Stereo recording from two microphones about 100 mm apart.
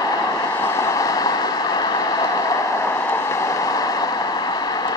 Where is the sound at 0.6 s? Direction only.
30° left (ahead or behind).